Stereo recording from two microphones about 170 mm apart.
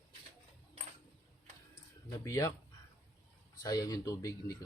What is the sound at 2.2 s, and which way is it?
Speech, 20° left (ahead or behind).